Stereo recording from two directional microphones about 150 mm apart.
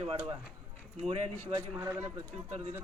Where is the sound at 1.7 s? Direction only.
15° right (ahead or behind).